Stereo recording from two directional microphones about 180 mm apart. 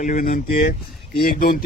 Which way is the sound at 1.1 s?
55° left (ahead or behind).